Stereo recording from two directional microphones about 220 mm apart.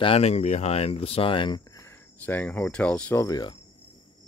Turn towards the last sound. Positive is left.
turn(degrees=15)  # may be behind; listen again after turning